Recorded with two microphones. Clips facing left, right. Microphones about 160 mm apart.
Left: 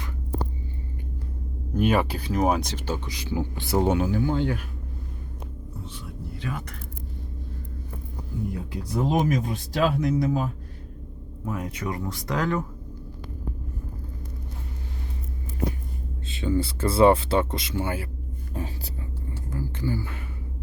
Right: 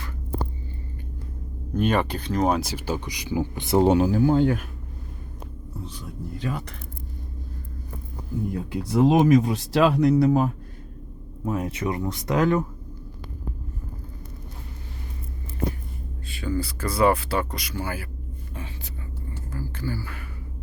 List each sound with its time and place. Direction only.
1.7 s speech: 10° left (ahead or behind)
2.6 s speech: 10° right (ahead or behind); by 4.6 s 45° right (ahead or behind)
6.4 s speech: 35° right (ahead or behind)
8.8 s speech: 85° right; by 10.5 s 65° right (ahead or behind)
11.4 s speech: 25° right (ahead or behind)
16.2 s speech: 25° left (ahead or behind)
18.5 s speech: 40° left (ahead or behind)
19.5 s speech: 20° left (ahead or behind)